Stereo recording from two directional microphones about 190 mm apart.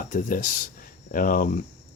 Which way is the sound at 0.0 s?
45° left (ahead or behind).